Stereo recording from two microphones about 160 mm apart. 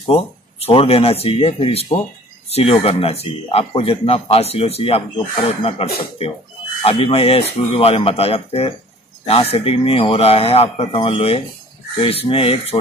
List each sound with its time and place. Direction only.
0.0 s a man's voice: 35° left (ahead or behind)